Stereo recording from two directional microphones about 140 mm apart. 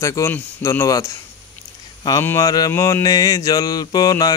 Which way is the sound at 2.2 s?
20° left (ahead or behind).